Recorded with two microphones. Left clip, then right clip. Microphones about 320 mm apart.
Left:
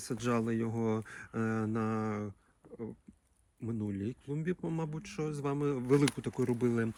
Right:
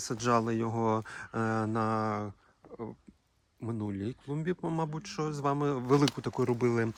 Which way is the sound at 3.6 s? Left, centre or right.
Centre.